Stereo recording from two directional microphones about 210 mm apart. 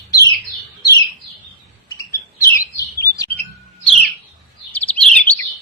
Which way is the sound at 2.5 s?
15° left (ahead or behind).